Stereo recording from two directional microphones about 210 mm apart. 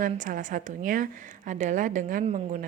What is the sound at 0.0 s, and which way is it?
Speech, 40° right (ahead or behind).